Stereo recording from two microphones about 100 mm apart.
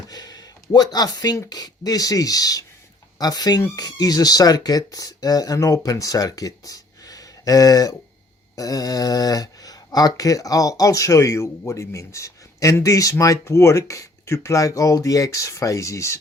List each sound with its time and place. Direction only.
0.1 s speech: 40° left (ahead or behind)